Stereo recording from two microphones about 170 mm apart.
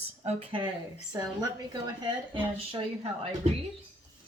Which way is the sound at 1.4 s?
25° right (ahead or behind).